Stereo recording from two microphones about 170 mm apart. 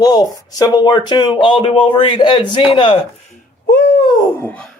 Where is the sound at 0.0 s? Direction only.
25° left (ahead or behind).